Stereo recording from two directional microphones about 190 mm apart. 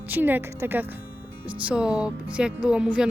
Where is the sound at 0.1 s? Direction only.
10° right (ahead or behind).